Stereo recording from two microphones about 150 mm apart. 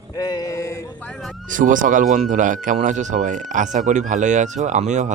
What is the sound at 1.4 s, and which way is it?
Speech, 60° right (ahead or behind).